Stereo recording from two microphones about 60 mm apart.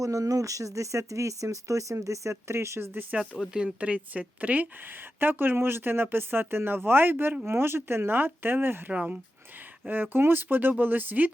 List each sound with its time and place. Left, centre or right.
0.0 s speech: right
3.3 s speech: centre
3.6 s speech: right
8.9 s speech: right